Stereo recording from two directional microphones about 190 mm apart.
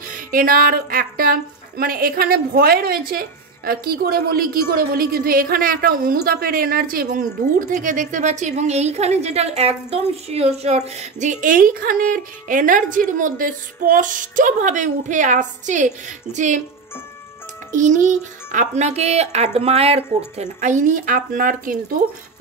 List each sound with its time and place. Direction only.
0.1 s a woman's voice: 45° right (ahead or behind)
17.6 s a child's voice: 40° right (ahead or behind)